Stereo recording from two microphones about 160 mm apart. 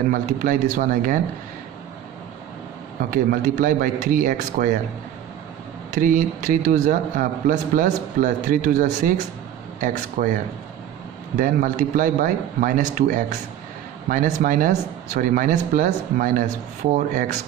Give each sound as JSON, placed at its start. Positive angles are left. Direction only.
{"t": 0.1, "sound": "a man's voice", "side_deg": -55}
{"t": 3.0, "sound": "a man's voice", "side_deg": -60}
{"t": 5.9, "sound": "a man's voice", "side_deg": -55}